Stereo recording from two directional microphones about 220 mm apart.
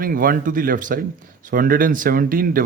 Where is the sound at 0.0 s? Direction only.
40° right (ahead or behind).